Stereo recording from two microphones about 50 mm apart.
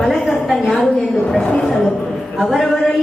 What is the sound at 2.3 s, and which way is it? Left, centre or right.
Speech, centre.